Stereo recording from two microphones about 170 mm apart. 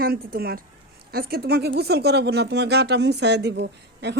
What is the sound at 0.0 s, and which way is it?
Speech, 65° right (ahead or behind).